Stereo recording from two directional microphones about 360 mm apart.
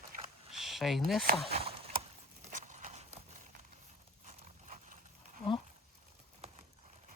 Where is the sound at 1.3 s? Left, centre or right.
Centre.